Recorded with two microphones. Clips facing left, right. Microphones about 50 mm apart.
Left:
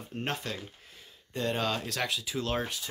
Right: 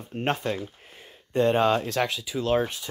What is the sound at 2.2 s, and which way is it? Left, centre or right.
Speech, centre.